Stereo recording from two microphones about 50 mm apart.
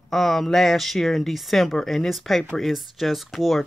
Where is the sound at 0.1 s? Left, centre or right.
Centre.